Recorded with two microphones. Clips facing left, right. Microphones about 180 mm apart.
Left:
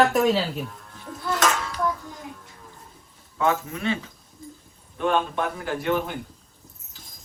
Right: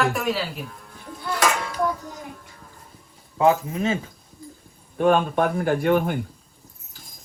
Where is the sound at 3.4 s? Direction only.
35° right (ahead or behind); by 6.1 s 50° right (ahead or behind).